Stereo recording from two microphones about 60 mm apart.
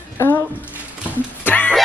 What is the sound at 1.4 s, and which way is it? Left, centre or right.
Music, left.